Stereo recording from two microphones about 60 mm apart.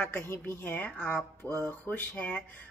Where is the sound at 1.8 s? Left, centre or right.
Left.